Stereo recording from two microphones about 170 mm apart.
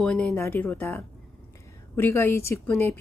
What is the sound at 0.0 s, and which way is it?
A woman's voice, 5° left (ahead or behind).